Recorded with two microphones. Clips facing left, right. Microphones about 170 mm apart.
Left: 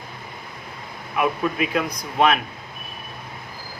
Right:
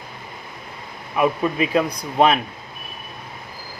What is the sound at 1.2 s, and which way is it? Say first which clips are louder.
Speech: right 3 dB; 30° right (ahead or behind).